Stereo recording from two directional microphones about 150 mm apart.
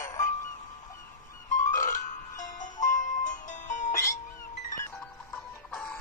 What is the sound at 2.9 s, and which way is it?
Music, 60° left (ahead or behind).